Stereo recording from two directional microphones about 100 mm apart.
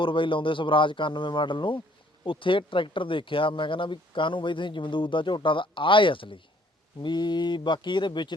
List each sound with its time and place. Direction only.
0.0 s speech: 60° left (ahead or behind)